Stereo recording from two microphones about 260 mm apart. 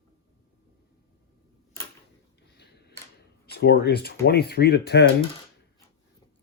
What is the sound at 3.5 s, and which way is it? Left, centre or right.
Speech, left.